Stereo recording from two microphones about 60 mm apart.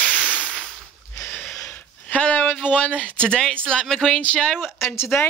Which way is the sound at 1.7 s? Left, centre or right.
Left.